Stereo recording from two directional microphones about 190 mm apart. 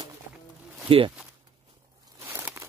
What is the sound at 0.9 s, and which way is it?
Speech, 30° right (ahead or behind).